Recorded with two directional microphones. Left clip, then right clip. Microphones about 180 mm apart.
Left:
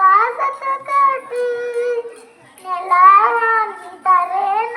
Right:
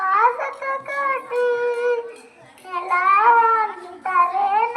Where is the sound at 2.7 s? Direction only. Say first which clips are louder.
Left 8 dB; 30° left (ahead or behind).